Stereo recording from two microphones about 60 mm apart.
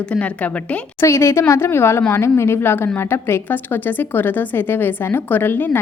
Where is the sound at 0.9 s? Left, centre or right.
Left.